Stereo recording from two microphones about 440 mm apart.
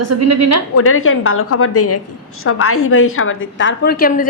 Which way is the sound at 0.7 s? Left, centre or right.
Left.